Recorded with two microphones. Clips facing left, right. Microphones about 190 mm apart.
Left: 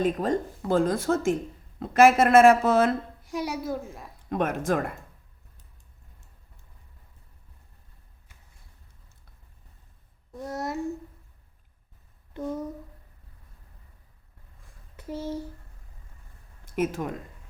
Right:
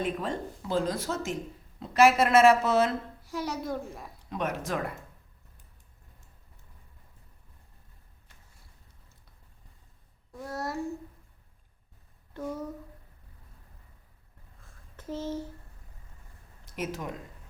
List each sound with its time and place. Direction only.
0.0 s speech: 40° left (ahead or behind)
3.2 s a woman's voice: 15° left (ahead or behind)
4.3 s speech: 50° left (ahead or behind)
10.4 s child singing: 20° left (ahead or behind)
12.3 s speech: 15° left (ahead or behind)
14.9 s speech: 10° left (ahead or behind)
16.6 s speech: 50° left (ahead or behind)